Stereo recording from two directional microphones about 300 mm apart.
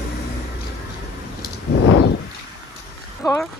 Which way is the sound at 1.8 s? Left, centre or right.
Left.